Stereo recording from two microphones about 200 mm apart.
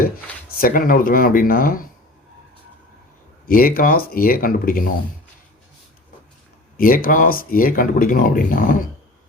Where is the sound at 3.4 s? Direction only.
45° left (ahead or behind).